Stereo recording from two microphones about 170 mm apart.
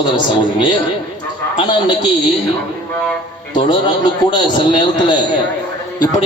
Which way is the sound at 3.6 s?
30° left (ahead or behind).